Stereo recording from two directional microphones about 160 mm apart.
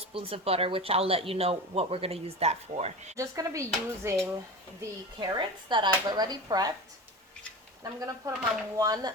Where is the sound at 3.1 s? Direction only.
20° right (ahead or behind).